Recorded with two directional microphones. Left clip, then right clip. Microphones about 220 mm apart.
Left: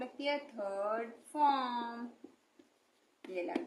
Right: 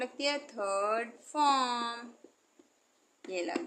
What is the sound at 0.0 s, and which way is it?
Speech, 40° right (ahead or behind).